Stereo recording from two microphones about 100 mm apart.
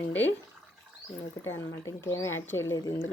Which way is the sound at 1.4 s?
25° left (ahead or behind).